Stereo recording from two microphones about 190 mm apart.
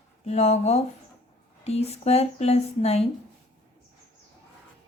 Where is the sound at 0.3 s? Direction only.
35° left (ahead or behind).